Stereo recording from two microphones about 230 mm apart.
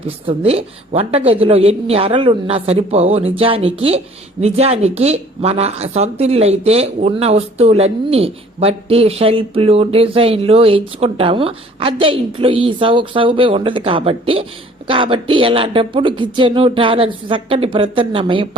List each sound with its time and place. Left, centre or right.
0.3 s a woman's voice: right